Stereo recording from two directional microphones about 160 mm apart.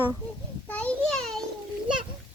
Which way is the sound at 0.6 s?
10° left (ahead or behind).